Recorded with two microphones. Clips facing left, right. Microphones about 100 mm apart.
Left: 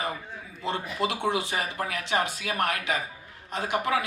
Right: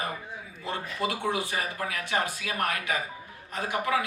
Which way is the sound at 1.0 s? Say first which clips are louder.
Left 2 dB; 20° left (ahead or behind).